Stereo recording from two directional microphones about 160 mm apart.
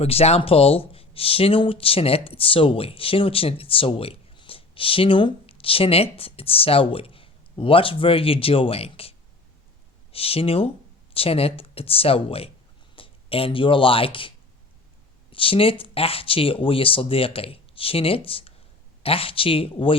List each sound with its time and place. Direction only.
0.0 s speech: 40° left (ahead or behind)